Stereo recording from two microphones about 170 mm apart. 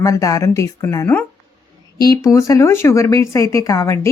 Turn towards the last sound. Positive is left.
turn(degrees=20)  # may be behind; listen again after turning